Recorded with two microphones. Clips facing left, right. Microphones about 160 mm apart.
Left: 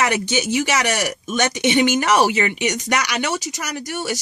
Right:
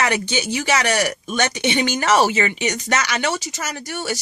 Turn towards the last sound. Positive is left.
turn(degrees=15)  # may be behind; listen again after turning